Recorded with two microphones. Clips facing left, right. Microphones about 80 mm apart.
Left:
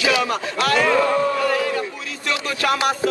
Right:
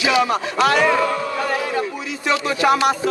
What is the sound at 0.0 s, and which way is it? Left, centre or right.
Speech, centre.